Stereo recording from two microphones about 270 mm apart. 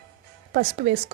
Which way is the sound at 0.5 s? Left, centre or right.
Right.